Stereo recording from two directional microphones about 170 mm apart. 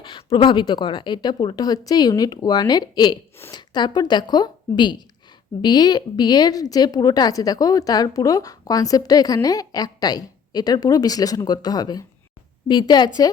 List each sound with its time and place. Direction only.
0.0 s a woman's voice: 25° left (ahead or behind)
13.2 s a woman's voice: 20° left (ahead or behind)